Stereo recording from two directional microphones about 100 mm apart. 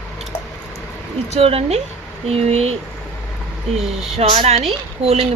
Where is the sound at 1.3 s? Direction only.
85° right.